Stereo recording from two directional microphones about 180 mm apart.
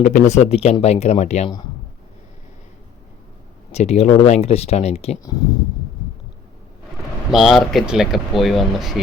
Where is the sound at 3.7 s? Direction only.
35° left (ahead or behind).